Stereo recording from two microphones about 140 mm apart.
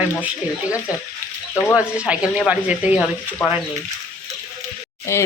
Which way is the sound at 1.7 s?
10° right (ahead or behind).